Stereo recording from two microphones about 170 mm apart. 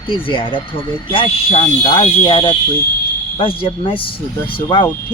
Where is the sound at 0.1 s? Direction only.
30° left (ahead or behind).